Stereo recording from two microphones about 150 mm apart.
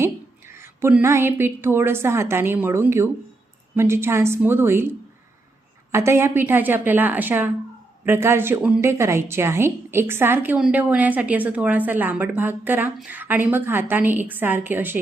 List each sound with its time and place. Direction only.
0.6 s a woman's voice: 15° right (ahead or behind)
5.9 s a woman's voice: 15° right (ahead or behind)